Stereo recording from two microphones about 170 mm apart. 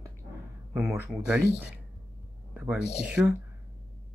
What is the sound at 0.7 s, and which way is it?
Speech, 10° right (ahead or behind).